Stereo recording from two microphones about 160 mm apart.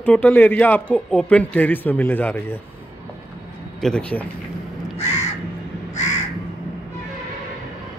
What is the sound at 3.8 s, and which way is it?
Speech, 5° left (ahead or behind).